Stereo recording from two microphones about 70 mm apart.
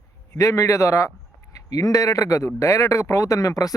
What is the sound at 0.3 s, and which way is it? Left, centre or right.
Speech, left.